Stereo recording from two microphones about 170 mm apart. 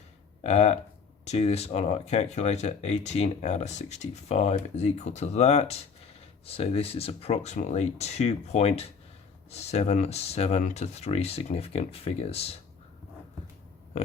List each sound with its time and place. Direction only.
0.4 s speech: 40° left (ahead or behind)